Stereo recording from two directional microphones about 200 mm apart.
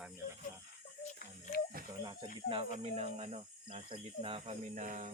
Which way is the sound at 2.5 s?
30° right (ahead or behind).